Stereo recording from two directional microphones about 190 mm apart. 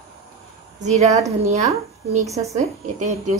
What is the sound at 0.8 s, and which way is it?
A woman's voice, 35° right (ahead or behind).